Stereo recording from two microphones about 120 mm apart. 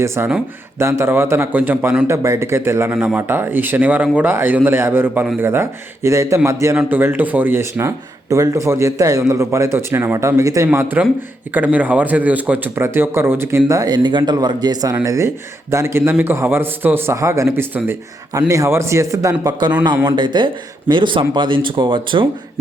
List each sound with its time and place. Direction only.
0.0 s speech: 25° right (ahead or behind)
10.7 s speech: 15° right (ahead or behind)
13.7 s speech: 30° right (ahead or behind)